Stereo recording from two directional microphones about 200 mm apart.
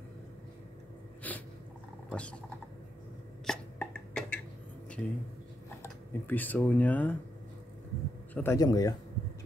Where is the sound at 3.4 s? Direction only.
5° left (ahead or behind).